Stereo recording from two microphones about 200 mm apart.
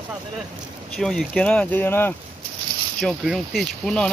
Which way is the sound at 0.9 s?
5° left (ahead or behind).